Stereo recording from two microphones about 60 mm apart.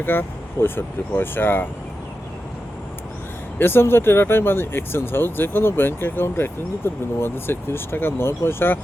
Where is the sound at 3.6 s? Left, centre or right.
Left.